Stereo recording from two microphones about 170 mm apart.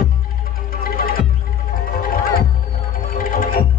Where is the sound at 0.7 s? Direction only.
60° left (ahead or behind).